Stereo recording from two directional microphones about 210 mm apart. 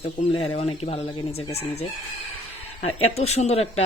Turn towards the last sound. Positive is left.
turn(degrees=30)  # may be behind; listen again after turning